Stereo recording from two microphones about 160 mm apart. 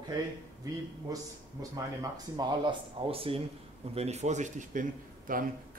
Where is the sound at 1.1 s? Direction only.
20° right (ahead or behind); by 4.8 s 50° right (ahead or behind).